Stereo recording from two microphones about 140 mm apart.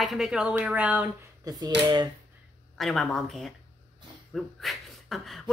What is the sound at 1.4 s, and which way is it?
Speech, 25° right (ahead or behind).